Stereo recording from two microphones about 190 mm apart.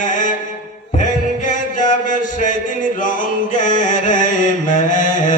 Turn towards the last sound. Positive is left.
turn(degrees=45)  # may be behind; listen again after turning